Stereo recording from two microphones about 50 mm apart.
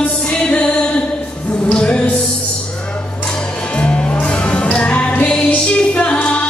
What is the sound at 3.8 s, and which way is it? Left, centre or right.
Music, left.